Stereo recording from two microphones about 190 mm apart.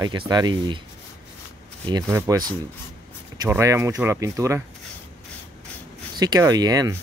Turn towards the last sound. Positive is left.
turn(degrees=-20)  # may be behind; listen again after turning